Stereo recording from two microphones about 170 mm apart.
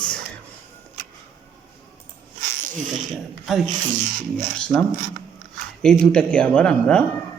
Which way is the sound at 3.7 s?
50° right (ahead or behind).